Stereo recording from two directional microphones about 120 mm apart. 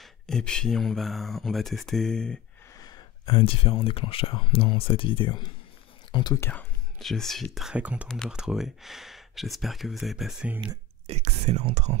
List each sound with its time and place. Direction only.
0.0 s speech: 5° left (ahead or behind)
2.7 s gasp: 30° left (ahead or behind)
3.3 s speech: 50° left (ahead or behind)
6.3 s speech: 20° left (ahead or behind)
7.0 s speech: centre (ahead or behind)
11.1 s speech: 60° right (ahead or behind)